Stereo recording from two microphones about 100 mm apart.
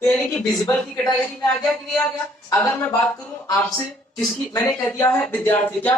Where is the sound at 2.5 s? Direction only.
20° left (ahead or behind).